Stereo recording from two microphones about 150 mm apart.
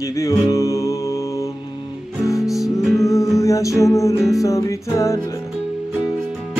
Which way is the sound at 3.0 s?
20° left (ahead or behind).